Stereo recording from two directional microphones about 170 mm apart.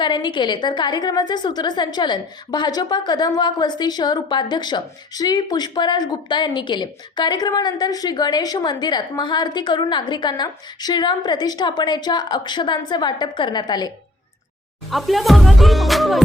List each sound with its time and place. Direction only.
0.0 s a woman's voice: 25° left (ahead or behind)
14.8 s speech: centre (ahead or behind)